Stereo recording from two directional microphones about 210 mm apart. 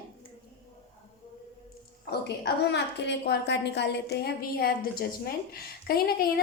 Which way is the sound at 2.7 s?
55° left (ahead or behind).